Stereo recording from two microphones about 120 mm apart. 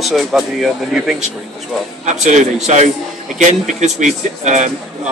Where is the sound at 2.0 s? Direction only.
90° right.